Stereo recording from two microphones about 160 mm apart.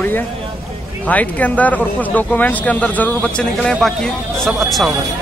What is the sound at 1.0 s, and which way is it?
Speech, 10° left (ahead or behind).